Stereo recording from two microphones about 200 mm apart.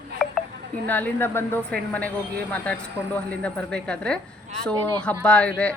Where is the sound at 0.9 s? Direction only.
10° left (ahead or behind).